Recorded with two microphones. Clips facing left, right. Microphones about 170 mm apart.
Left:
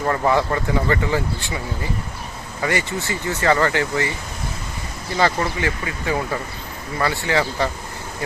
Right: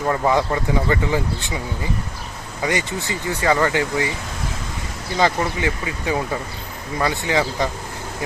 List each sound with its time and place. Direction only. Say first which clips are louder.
0.0 s speech: even; 15° right (ahead or behind)
2.6 s speech: even; 15° right (ahead or behind)
5.1 s speech: even; 15° right (ahead or behind)